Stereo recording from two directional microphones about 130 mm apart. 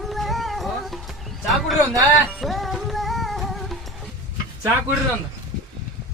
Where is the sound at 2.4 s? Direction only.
Centre (ahead or behind).